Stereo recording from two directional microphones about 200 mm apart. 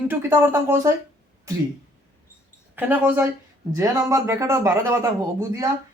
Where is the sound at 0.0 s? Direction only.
10° right (ahead or behind).